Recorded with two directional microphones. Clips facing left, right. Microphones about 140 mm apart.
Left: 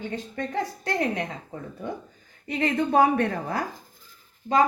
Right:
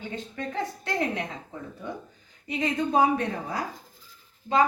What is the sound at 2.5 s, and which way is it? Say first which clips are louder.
A woman's voice: left 2 dB; 60° left (ahead or behind).